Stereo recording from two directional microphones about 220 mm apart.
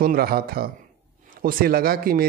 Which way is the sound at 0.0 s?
45° right (ahead or behind).